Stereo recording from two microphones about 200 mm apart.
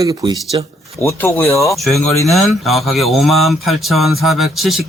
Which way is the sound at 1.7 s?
Centre (ahead or behind).